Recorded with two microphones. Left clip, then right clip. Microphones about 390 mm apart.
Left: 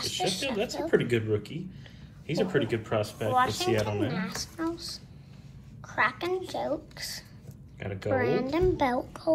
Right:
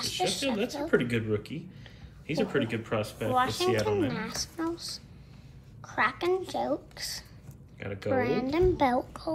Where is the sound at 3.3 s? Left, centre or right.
Centre.